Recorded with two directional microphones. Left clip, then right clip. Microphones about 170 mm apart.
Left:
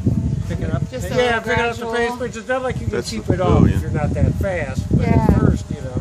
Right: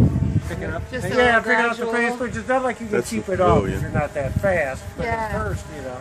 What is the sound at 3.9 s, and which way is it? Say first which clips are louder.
A man's voice: even; 70° left (ahead or behind).